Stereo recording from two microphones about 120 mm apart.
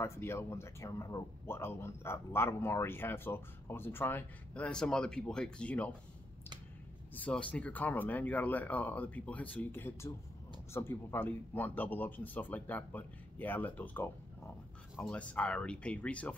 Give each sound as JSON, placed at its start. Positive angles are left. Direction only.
{"t": 0.0, "sound": "speech", "side_deg": 20}
{"t": 7.2, "sound": "speech", "side_deg": 10}